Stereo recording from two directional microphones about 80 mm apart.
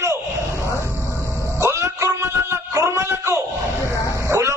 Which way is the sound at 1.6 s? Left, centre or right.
Right.